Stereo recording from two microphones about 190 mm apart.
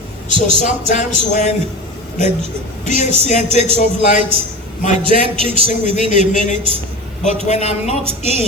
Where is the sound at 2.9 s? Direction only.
40° left (ahead or behind).